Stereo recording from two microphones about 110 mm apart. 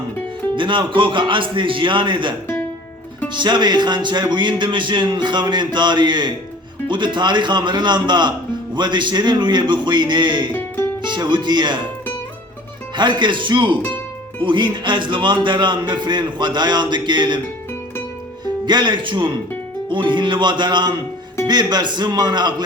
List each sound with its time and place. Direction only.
0.5 s speech: 45° right (ahead or behind)
10.5 s music: 20° left (ahead or behind)
11.0 s speech: 45° right (ahead or behind)
13.0 s speech: 45° right (ahead or behind)
18.4 s speech: 40° right (ahead or behind)